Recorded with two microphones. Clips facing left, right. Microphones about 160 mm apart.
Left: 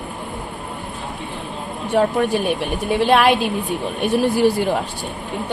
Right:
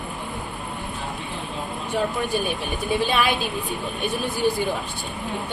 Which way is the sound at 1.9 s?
75° left (ahead or behind).